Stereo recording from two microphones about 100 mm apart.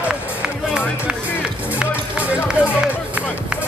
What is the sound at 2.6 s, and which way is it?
Run, 15° right (ahead or behind).